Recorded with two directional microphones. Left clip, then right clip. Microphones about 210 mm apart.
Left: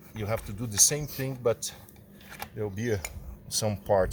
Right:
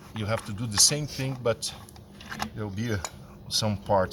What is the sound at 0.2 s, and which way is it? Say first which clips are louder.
Speech: right 2 dB; 30° left (ahead or behind).